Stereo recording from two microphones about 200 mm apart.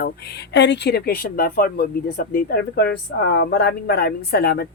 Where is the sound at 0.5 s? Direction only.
60° left (ahead or behind).